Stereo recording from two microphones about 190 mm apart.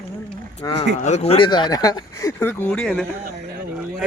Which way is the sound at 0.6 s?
25° left (ahead or behind).